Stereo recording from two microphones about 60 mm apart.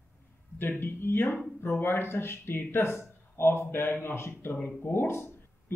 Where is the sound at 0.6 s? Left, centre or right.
Left.